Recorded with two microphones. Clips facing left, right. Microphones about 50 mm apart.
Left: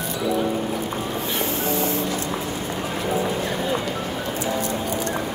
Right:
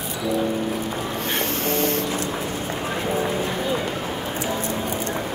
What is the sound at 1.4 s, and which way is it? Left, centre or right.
Printer, right.